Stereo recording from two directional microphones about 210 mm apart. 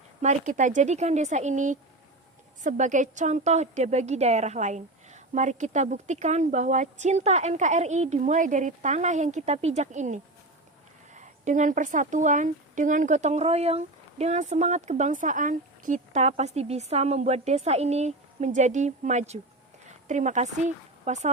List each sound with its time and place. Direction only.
0.2 s speech: 35° right (ahead or behind)